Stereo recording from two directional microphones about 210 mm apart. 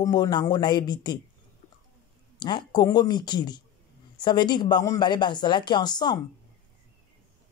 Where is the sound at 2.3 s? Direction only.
20° left (ahead or behind).